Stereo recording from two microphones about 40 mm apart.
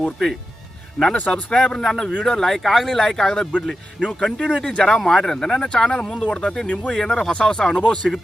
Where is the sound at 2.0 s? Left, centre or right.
Left.